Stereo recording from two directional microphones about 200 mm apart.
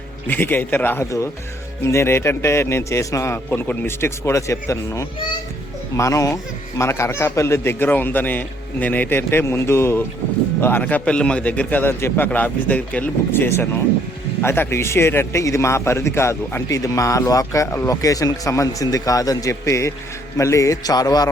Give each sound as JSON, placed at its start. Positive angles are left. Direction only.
{"t": 0.3, "sound": "a man's voice", "side_deg": 10}